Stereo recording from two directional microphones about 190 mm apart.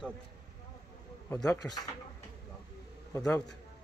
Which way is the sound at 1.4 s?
20° left (ahead or behind).